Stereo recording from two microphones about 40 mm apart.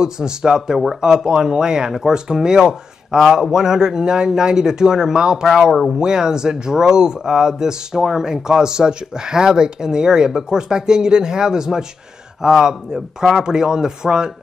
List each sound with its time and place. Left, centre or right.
0.0 s speech: centre